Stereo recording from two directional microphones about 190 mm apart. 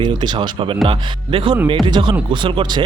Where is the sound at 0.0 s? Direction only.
25° right (ahead or behind).